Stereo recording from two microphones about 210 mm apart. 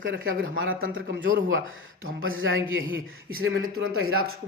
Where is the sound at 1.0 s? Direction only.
60° right (ahead or behind); by 4.2 s 75° right (ahead or behind).